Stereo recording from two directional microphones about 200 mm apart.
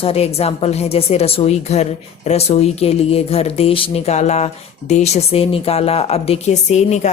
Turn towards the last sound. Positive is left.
turn(degrees=35)  # may be behind; listen again after turning